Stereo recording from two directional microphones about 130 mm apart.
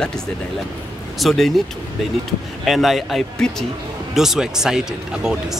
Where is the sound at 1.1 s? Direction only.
Centre (ahead or behind).